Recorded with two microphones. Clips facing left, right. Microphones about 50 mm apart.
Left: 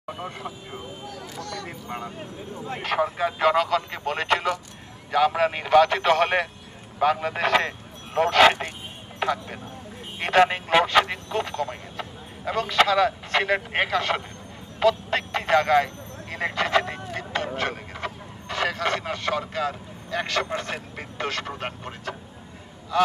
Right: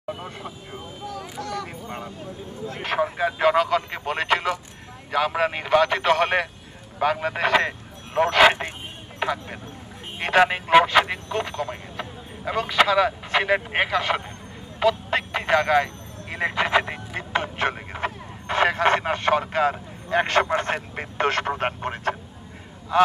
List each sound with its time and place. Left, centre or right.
0.0 s vehicle: centre
1.3 s a sound: centre
2.8 s speech: centre
14.8 s telephone: centre; by 17.5 s right
17.6 s speech: right
22.9 s speech: right